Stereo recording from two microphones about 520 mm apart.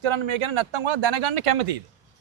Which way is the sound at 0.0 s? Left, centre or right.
Right.